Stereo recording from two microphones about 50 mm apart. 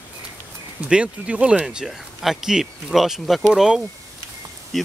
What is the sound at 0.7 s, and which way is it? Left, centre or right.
Speech, right.